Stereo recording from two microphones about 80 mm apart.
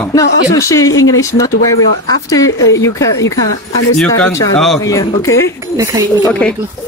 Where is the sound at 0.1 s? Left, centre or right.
Left.